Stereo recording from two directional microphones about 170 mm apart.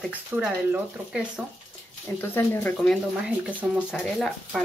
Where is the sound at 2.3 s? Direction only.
15° left (ahead or behind).